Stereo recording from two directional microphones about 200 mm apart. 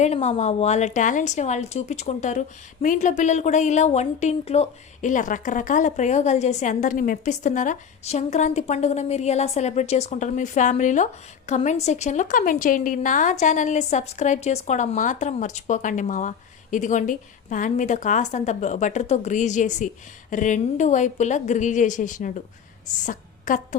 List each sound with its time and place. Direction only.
0.0 s speech: 35° left (ahead or behind)
23.5 s speech: 40° left (ahead or behind)